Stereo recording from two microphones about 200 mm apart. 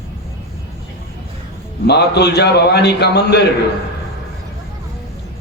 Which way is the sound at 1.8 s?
55° left (ahead or behind).